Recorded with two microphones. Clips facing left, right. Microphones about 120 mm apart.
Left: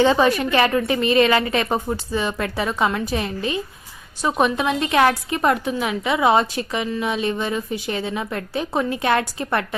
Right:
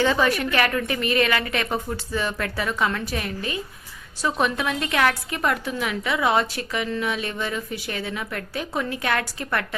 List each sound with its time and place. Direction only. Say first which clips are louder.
0.0 s a woman's voice: left 4 dB; 25° left (ahead or behind)